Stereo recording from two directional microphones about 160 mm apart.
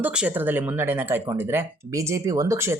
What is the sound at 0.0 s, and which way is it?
Speech, 5° right (ahead or behind).